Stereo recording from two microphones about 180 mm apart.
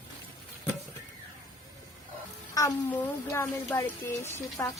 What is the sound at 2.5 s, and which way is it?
Speech, 20° left (ahead or behind).